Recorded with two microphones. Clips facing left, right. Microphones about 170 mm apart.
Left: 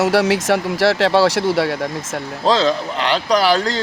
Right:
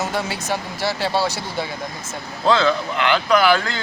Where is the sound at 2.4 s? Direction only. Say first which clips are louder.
Left 1 dB; 35° left (ahead or behind).